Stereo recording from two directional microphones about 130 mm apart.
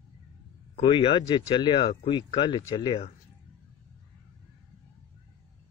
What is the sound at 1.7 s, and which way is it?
Speech, 50° left (ahead or behind).